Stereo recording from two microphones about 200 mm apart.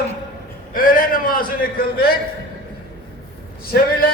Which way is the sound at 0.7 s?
45° left (ahead or behind).